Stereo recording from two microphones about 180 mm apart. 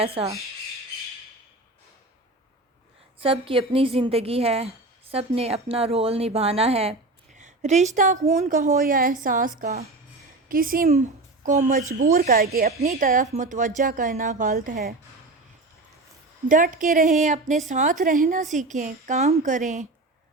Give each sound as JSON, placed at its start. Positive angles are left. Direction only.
{"t": 0.0, "sound": "a woman's voice", "side_deg": -30}
{"t": 3.2, "sound": "a woman's voice", "side_deg": -30}
{"t": 16.5, "sound": "a woman's voice", "side_deg": -45}